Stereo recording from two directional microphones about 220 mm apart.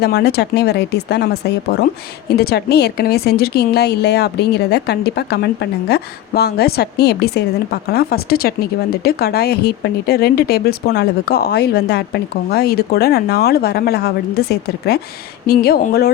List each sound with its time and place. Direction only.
0.0 s a woman's voice: 50° left (ahead or behind)